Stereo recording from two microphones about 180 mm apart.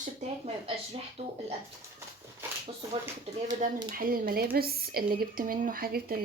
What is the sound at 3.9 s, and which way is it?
Speech, 55° right (ahead or behind).